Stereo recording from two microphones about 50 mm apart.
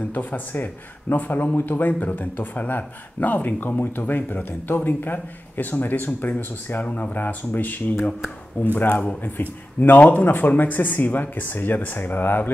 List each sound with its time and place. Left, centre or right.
0.1 s speech: left